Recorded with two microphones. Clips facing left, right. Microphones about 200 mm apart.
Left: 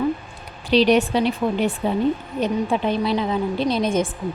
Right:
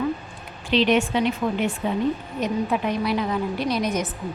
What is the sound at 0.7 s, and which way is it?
A woman's voice, 35° left (ahead or behind).